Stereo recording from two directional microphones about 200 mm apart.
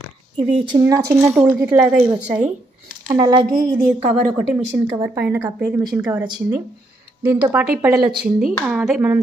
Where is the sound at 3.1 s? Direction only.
20° right (ahead or behind).